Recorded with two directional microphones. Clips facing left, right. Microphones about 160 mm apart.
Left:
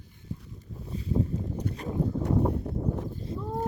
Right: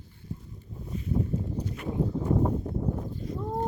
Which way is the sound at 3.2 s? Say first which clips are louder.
Right 1 dB; 30° left (ahead or behind).